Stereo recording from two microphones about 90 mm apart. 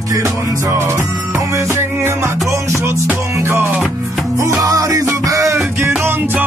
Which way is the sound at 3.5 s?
25° right (ahead or behind).